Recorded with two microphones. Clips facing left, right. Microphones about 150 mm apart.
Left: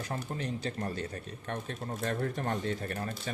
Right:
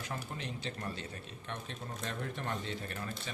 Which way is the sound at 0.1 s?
40° left (ahead or behind).